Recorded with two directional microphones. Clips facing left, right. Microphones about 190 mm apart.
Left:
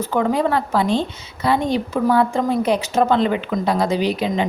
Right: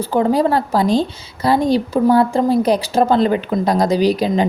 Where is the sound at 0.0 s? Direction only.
35° right (ahead or behind).